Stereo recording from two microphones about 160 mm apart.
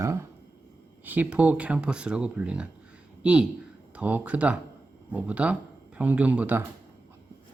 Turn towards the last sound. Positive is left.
turn(degrees=-10)  # may be behind; listen again after turning